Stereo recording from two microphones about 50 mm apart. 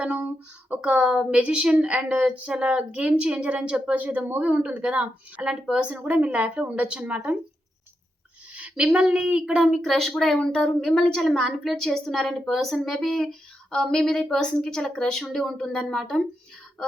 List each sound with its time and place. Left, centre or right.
0.7 s a woman's voice: right
3.9 s a woman's voice: right; by 5.8 s centre
5.8 s a woman's voice: right
8.7 s a woman's voice: centre
9.6 s a woman's voice: centre